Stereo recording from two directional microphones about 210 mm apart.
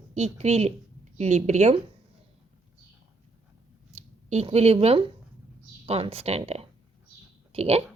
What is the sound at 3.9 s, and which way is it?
A woman's voice, 30° right (ahead or behind).